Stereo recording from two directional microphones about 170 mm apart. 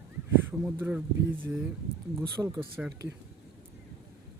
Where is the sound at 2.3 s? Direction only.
25° right (ahead or behind).